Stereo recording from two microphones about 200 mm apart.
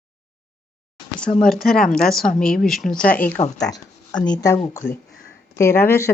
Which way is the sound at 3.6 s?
20° left (ahead or behind).